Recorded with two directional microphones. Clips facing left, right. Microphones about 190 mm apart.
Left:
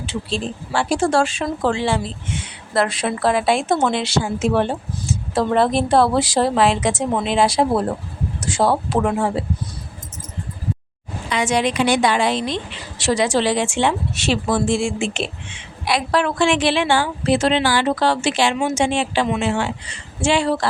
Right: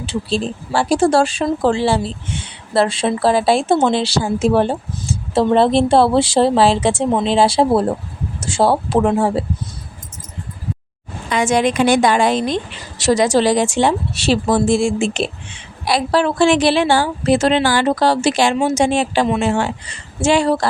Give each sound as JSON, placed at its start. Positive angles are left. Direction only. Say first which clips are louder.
{"t": 0.0, "sound": "a woman's voice", "louder": "right 4 dB", "side_deg": -35}
{"t": 11.3, "sound": "a woman's voice", "louder": "right 4 dB", "side_deg": -45}